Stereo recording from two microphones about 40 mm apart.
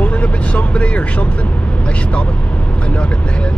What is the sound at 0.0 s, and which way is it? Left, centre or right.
Vehicle, left.